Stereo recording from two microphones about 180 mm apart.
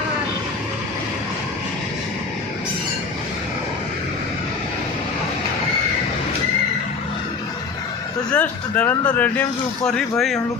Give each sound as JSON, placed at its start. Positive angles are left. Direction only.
{"t": 8.3, "sound": "speech", "side_deg": 10}